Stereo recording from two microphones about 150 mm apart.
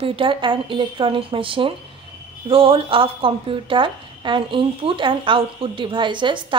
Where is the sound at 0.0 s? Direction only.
35° right (ahead or behind).